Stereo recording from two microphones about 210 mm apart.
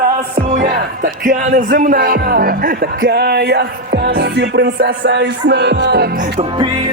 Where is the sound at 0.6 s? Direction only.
40° right (ahead or behind).